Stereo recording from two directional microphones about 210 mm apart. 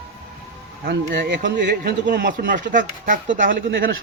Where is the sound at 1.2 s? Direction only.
55° right (ahead or behind).